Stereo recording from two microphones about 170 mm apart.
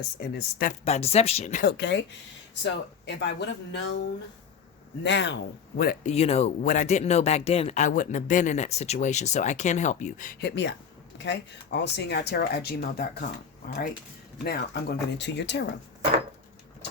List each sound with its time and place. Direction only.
0.2 s speech: 75° left (ahead or behind)
0.9 s speech: 40° left (ahead or behind)
1.7 s speech: 90° left
5.0 s speech: 90° left; by 6.0 s 65° left (ahead or behind)
6.0 s speech: 40° left (ahead or behind)
10.4 s speech: 90° left